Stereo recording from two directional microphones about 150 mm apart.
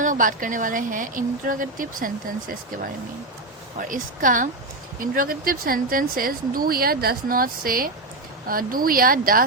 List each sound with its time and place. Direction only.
0.0 s speech: 60° right (ahead or behind)